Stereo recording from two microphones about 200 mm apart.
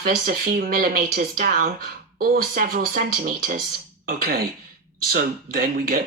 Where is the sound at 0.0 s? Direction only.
45° right (ahead or behind).